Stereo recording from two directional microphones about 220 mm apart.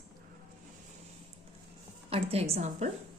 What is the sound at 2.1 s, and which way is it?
Speech, 25° right (ahead or behind).